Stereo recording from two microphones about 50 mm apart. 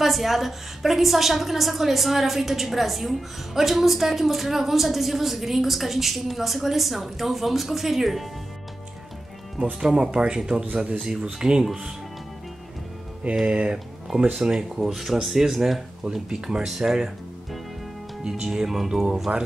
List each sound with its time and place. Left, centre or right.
0.0 s a woman's voice: centre
9.8 s speech: centre
13.5 s speech: right
14.4 s a woman's voice: centre
16.0 s speech: centre
19.3 s speech: right